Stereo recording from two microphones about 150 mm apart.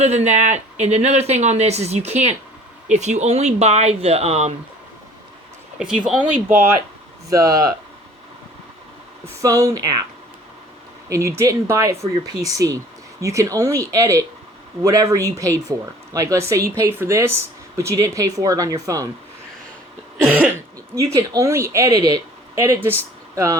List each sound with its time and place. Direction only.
0.0 s speech: 45° right (ahead or behind)
6.1 s speech: 10° right (ahead or behind)
9.4 s speech: 20° right (ahead or behind)
11.3 s speech: 20° right (ahead or behind)
20.9 s speech: 20° right (ahead or behind)